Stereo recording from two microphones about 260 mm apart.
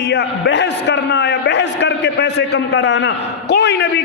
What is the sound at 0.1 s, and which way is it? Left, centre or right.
A man's voice, left.